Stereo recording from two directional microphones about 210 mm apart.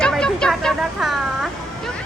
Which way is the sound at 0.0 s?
5° left (ahead or behind).